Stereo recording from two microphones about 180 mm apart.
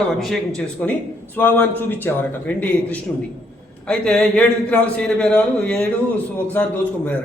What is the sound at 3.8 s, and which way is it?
Speech, 5° left (ahead or behind).